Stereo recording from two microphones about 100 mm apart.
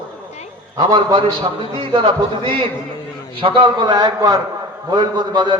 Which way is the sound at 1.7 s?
70° right (ahead or behind).